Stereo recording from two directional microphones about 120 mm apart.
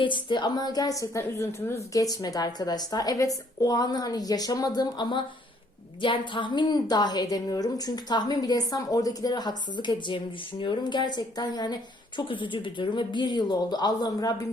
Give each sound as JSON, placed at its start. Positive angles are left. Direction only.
{"t": 0.0, "sound": "a woman's voice", "side_deg": 40}